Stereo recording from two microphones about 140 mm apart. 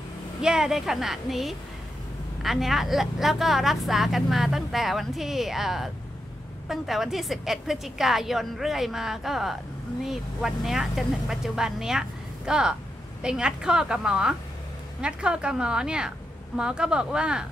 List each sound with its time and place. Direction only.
0.4 s a woman's voice: 5° right (ahead or behind)